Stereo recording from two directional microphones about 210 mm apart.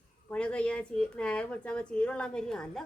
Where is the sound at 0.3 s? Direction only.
5° left (ahead or behind).